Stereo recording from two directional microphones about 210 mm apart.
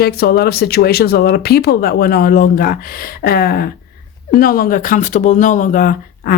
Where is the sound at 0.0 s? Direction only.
45° left (ahead or behind).